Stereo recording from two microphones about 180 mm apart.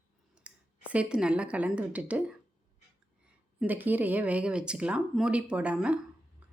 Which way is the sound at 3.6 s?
10° right (ahead or behind).